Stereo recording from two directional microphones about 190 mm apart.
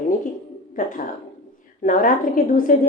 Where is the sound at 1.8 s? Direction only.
45° left (ahead or behind).